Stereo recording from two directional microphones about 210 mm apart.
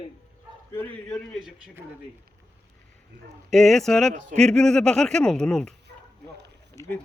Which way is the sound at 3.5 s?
Centre (ahead or behind).